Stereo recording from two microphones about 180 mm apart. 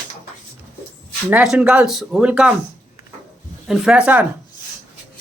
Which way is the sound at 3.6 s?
5° right (ahead or behind).